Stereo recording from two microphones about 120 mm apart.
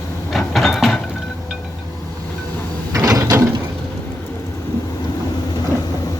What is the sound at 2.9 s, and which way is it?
Gears, 30° right (ahead or behind).